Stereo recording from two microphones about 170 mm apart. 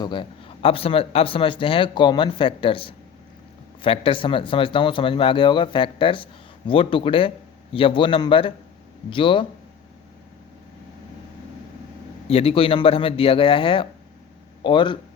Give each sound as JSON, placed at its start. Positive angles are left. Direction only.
{"t": 0.0, "sound": "speech", "side_deg": 30}
{"t": 12.3, "sound": "speech", "side_deg": 35}